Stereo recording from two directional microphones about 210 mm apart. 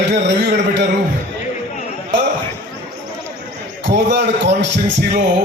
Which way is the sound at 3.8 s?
55° right (ahead or behind).